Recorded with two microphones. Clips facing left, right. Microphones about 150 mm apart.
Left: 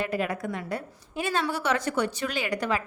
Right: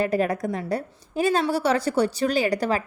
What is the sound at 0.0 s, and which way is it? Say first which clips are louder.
A woman's voice: right 6 dB; 40° right (ahead or behind).